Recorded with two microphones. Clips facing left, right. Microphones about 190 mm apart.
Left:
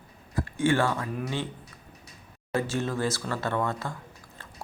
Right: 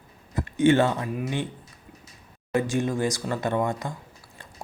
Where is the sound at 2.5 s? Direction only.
15° right (ahead or behind).